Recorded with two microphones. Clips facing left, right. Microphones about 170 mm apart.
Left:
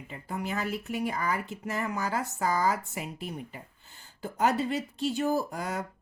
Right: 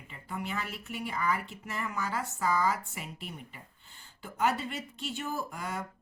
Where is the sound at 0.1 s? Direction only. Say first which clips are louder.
Left 3 dB; 40° left (ahead or behind).